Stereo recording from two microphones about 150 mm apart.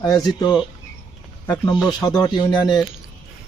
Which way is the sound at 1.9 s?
25° left (ahead or behind).